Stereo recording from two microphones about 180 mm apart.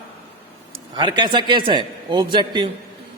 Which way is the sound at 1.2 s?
25° right (ahead or behind).